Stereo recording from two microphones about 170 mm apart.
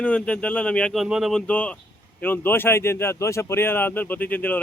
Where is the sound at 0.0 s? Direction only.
5° left (ahead or behind).